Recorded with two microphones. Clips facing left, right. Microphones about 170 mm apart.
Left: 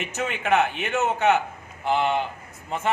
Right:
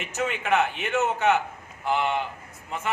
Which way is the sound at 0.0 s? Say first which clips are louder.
Even; 20° left (ahead or behind).